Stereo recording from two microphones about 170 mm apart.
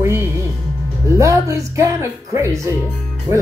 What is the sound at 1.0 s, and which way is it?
Speech, 15° right (ahead or behind).